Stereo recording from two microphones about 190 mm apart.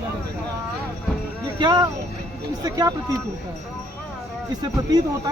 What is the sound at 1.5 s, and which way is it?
Speech, 20° right (ahead or behind).